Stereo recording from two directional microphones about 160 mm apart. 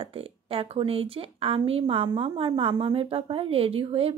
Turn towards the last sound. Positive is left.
turn(degrees=-35)  # may be behind; listen again after turning